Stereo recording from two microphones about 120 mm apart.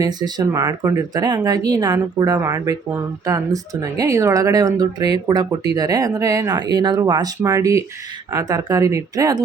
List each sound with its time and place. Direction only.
0.0 s speech: 35° right (ahead or behind)